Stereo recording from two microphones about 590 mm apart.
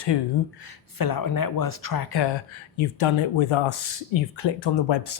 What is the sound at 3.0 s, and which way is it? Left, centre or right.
Speech, left.